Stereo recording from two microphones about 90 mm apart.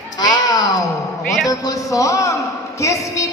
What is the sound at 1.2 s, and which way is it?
Speech, 5° left (ahead or behind).